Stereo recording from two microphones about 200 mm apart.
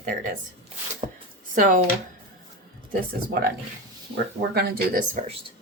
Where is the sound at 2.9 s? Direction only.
50° right (ahead or behind).